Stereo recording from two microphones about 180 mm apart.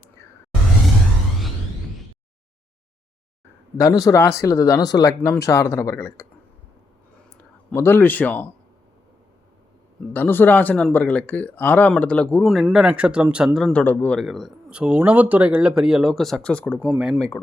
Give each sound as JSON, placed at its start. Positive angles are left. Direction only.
{"t": 3.8, "sound": "speech", "side_deg": 20}
{"t": 7.7, "sound": "speech", "side_deg": 10}
{"t": 10.1, "sound": "speech", "side_deg": 10}